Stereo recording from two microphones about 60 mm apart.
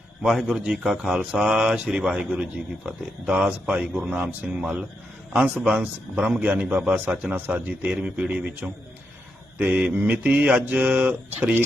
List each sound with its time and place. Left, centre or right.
0.2 s a man's voice: centre; by 7.9 s right
7.9 s speech: centre
9.9 s speech: right